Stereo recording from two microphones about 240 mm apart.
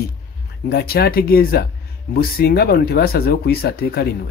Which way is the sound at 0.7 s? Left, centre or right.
Left.